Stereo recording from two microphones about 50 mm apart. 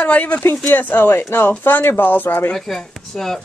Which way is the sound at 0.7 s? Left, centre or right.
Left.